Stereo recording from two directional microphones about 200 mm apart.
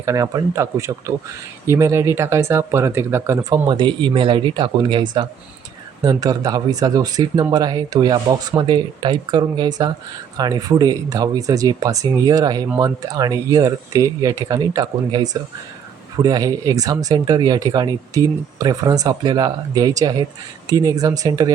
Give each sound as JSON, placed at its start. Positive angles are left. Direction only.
{"t": 0.0, "sound": "speech", "side_deg": -15}